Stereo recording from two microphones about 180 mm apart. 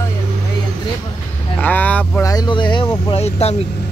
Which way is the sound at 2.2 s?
20° left (ahead or behind).